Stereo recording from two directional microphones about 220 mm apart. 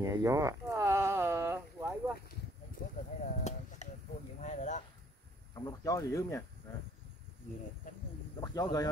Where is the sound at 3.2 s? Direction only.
30° left (ahead or behind).